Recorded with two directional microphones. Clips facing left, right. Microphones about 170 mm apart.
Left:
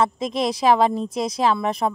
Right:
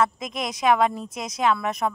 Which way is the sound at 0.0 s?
30° left (ahead or behind).